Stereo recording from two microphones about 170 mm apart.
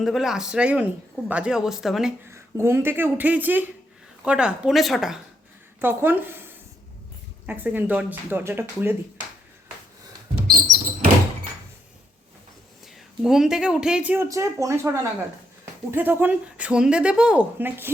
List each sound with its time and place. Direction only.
0.0 s speech: centre (ahead or behind)
2.3 s speech: 15° right (ahead or behind)
5.8 s speech: 15° right (ahead or behind)
7.4 s speech: 10° right (ahead or behind)
10.3 s a sound: 50° right (ahead or behind)
13.2 s speech: centre (ahead or behind)